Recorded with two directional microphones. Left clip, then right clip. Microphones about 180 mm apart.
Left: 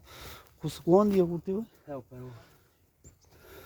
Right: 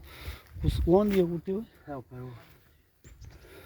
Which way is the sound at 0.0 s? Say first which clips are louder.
Even; 25° left (ahead or behind).